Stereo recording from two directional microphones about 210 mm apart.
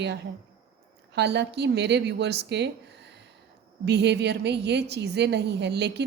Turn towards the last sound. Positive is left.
turn(degrees=-55)  # may be behind; listen again after turning